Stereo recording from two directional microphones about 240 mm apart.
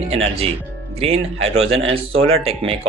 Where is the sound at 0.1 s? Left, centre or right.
Right.